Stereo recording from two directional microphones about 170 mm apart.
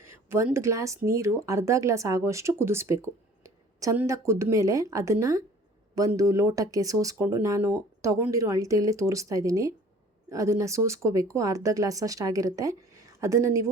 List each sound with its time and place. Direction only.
0.0 s speech: 15° right (ahead or behind)